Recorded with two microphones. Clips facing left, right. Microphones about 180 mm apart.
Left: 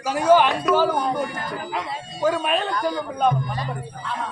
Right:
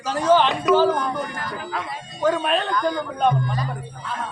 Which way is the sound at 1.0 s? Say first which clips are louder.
Left 2 dB; 20° left (ahead or behind).